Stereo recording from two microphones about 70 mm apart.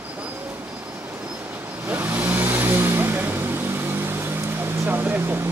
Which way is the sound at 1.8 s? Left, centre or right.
Right.